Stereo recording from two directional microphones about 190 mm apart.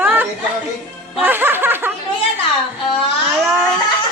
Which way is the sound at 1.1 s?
10° right (ahead or behind).